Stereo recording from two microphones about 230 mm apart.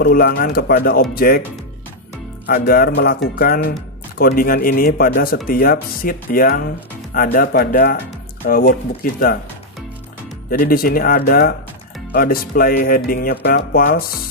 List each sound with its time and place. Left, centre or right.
0.0 s speech: left
2.4 s speech: left
10.6 s speech: left